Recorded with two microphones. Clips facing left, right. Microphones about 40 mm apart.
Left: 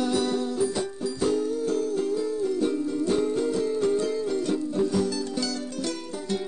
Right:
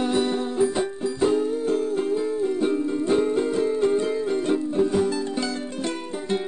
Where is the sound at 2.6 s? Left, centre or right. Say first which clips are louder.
Right 2 dB; right.